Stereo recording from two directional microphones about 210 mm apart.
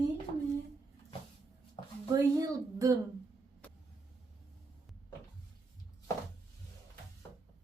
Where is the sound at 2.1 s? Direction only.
15° right (ahead or behind).